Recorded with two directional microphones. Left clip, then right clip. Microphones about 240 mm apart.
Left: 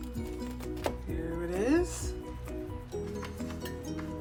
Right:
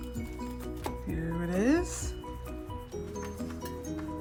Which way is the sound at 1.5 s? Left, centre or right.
Right.